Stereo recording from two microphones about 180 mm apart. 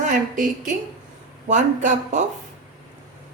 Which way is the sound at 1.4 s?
45° right (ahead or behind).